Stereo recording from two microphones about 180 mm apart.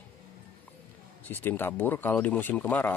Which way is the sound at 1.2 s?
10° left (ahead or behind).